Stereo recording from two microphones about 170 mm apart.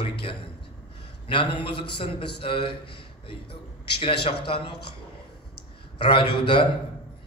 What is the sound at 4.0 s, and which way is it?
Speech, 30° left (ahead or behind).